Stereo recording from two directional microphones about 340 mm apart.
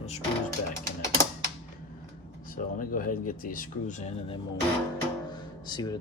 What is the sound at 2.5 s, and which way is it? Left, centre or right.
Speech, left.